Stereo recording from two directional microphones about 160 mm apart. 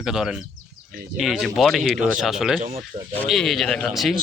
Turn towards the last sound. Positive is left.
turn(degrees=0)  # may be behind; listen again after turning